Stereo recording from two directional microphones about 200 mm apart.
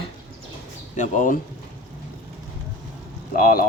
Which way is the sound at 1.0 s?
40° left (ahead or behind).